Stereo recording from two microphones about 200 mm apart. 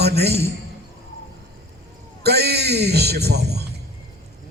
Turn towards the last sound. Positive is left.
turn(degrees=-55)  # may be behind; listen again after turning